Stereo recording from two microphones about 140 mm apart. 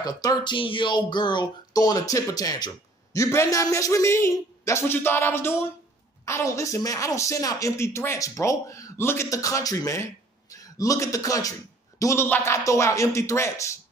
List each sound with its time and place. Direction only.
0.0 s a man's voice: 25° left (ahead or behind)